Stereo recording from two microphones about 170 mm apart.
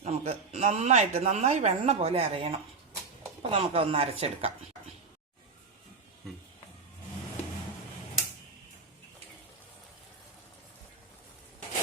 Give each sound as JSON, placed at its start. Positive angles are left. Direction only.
{"t": 0.0, "sound": "speech", "side_deg": -35}